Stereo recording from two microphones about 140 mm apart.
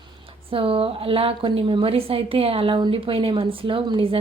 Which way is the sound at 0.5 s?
40° right (ahead or behind).